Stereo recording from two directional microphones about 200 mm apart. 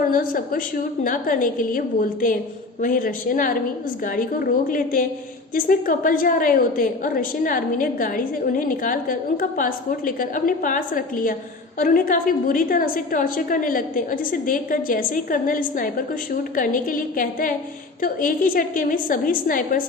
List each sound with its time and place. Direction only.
0.1 s a woman's voice: 45° left (ahead or behind)